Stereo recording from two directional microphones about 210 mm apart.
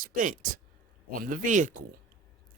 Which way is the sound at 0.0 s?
40° right (ahead or behind).